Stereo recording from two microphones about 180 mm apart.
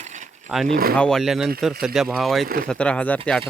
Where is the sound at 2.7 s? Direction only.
5° left (ahead or behind).